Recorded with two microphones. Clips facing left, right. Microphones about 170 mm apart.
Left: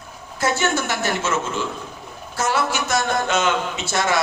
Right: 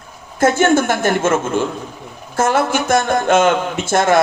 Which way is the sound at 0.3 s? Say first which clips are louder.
Right 8 dB; 50° right (ahead or behind).